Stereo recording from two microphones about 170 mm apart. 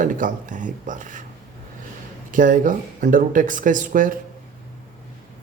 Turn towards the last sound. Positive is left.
turn(degrees=-50)  # may be behind; listen again after turning